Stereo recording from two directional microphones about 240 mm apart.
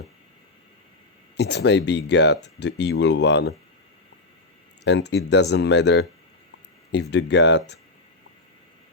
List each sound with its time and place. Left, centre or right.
1.4 s speech: left
4.8 s speech: left
7.1 s speech: left